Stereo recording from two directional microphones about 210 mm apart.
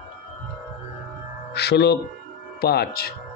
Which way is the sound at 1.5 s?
50° left (ahead or behind).